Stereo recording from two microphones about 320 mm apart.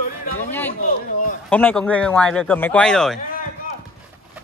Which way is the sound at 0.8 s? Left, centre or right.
Left.